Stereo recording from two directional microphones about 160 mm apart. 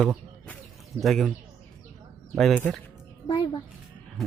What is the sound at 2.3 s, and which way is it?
Speech, centre (ahead or behind).